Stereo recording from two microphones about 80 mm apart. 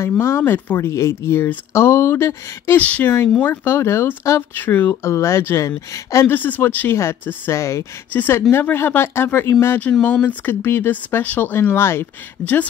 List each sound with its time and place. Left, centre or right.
0.0 s speech: left
2.8 s speech: centre; by 4.4 s left
4.4 s speech: left
5.0 s speech: left
6.2 s speech: left
8.1 s speech: left
10.0 s speech: left